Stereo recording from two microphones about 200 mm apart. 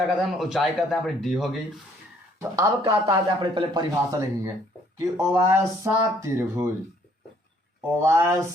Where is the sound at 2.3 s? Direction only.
15° right (ahead or behind).